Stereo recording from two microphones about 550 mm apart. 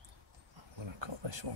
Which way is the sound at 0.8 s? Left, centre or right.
Right.